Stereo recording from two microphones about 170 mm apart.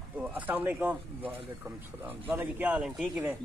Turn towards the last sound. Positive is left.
turn(degrees=-5)  # may be behind; listen again after turning